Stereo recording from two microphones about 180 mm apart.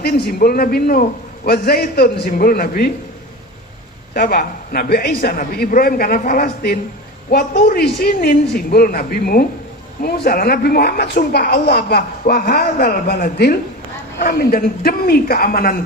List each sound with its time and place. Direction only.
0.0 s a woman's voice: 60° left (ahead or behind)
4.1 s a woman's voice: 55° left (ahead or behind)